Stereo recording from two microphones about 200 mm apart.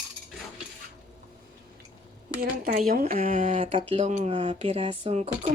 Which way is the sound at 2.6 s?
40° right (ahead or behind).